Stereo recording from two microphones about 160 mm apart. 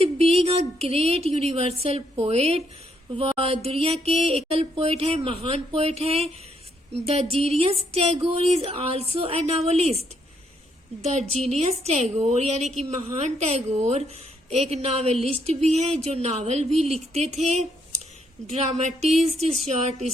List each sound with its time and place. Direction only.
0.0 s a woman's voice: 40° right (ahead or behind)